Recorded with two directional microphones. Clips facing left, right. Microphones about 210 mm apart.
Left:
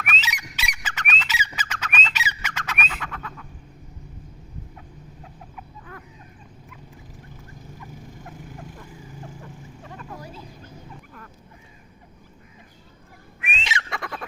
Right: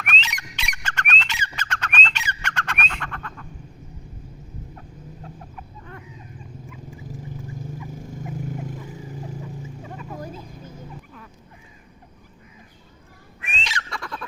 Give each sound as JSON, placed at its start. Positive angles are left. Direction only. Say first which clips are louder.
{"t": 0.0, "sound": "squawk", "louder": "even", "side_deg": 5}
{"t": 5.5, "sound": "chicken", "louder": "right 1 dB", "side_deg": 5}
{"t": 13.4, "sound": "fowl", "louder": "left 2 dB", "side_deg": 20}